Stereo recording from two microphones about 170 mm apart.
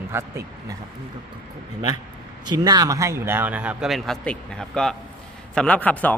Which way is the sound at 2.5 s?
25° right (ahead or behind).